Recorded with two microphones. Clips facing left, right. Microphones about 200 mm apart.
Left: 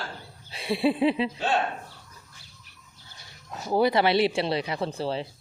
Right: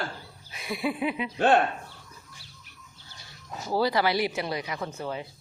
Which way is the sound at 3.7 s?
20° left (ahead or behind).